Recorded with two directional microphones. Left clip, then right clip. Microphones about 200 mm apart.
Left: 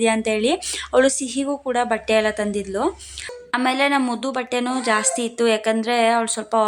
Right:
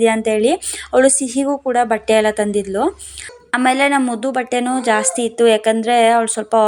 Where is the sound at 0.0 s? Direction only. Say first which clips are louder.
Right 5 dB; 10° right (ahead or behind).